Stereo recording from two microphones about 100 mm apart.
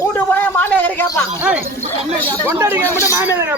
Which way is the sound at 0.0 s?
20° left (ahead or behind).